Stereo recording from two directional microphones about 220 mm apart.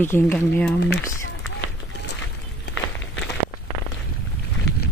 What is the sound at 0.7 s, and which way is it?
Speech, 50° left (ahead or behind).